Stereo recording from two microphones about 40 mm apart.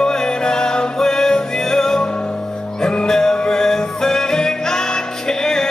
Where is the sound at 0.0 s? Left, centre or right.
Centre.